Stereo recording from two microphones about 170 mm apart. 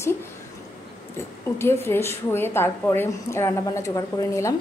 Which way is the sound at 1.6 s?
15° left (ahead or behind).